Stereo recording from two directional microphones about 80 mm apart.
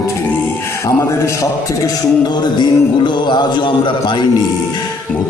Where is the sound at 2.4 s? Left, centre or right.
Left.